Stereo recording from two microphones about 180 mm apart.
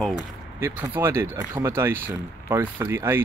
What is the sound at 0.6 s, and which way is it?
Speech, 15° right (ahead or behind).